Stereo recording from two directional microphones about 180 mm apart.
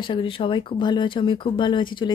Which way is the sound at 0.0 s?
30° left (ahead or behind).